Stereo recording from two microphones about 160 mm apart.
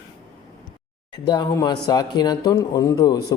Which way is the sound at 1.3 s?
25° left (ahead or behind).